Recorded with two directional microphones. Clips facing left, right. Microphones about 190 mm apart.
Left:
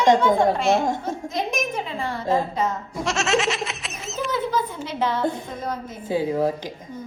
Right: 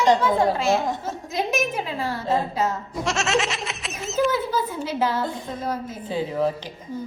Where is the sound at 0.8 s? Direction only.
50° left (ahead or behind).